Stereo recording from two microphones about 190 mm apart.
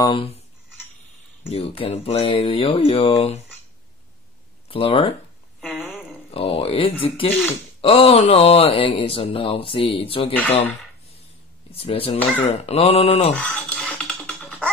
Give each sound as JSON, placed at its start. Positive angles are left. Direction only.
{"t": 0.0, "sound": "speech", "side_deg": 25}
{"t": 1.5, "sound": "speech", "side_deg": 30}
{"t": 4.6, "sound": "speech", "side_deg": 30}
{"t": 5.6, "sound": "a sound", "side_deg": 0}
{"t": 6.3, "sound": "speech", "side_deg": 30}
{"t": 11.7, "sound": "speech", "side_deg": 30}
{"t": 13.3, "sound": "music", "side_deg": 5}